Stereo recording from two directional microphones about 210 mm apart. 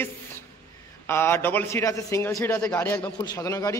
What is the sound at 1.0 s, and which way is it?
A man's voice, 10° left (ahead or behind).